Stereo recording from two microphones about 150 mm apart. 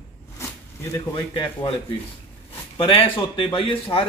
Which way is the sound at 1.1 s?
35° left (ahead or behind).